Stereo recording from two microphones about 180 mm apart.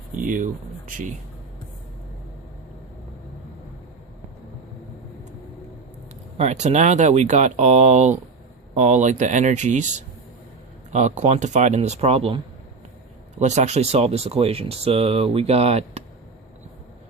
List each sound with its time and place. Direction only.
0.1 s speech: 45° right (ahead or behind)
6.3 s speech: 40° right (ahead or behind)
13.4 s speech: 40° right (ahead or behind)